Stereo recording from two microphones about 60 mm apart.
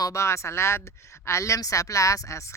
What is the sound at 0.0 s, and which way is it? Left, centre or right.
A woman's voice, left.